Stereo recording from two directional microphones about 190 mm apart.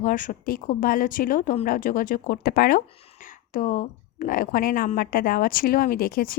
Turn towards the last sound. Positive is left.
turn(degrees=50)  # may be behind; listen again after turning